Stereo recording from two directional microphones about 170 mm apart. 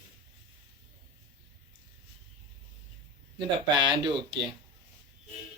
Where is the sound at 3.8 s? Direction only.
25° right (ahead or behind).